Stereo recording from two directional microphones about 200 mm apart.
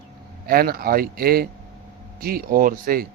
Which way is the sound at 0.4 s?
50° right (ahead or behind).